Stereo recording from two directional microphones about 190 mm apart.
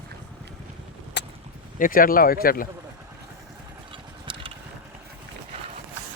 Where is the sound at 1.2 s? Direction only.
65° left (ahead or behind).